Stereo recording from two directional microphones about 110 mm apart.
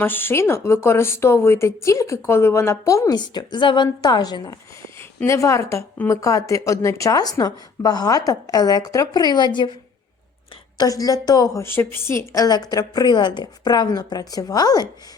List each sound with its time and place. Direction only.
0.0 s speech: 20° left (ahead or behind)
3.2 s a woman's voice: 40° left (ahead or behind)
5.2 s a woman's voice: 25° left (ahead or behind); by 9.7 s 45° left (ahead or behind)
10.8 s a woman's voice: 35° left (ahead or behind)
11.6 s a woman's voice: 20° left (ahead or behind)